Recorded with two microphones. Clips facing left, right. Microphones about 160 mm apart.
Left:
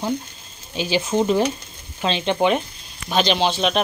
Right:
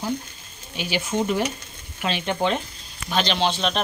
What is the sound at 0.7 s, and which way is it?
Speech, 30° left (ahead or behind).